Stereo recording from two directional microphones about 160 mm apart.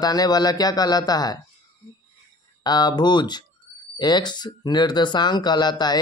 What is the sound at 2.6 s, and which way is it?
Speech, 25° left (ahead or behind).